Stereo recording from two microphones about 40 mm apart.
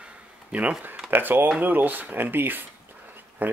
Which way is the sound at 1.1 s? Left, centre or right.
Right.